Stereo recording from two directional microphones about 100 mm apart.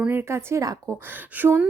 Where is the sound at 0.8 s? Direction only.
15° right (ahead or behind).